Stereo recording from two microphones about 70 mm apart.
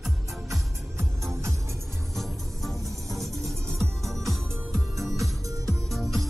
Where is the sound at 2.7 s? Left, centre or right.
Right.